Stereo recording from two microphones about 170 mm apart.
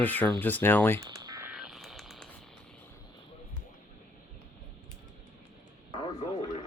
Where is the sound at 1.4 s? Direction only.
5° right (ahead or behind).